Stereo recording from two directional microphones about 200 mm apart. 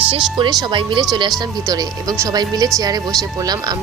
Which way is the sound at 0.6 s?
25° right (ahead or behind).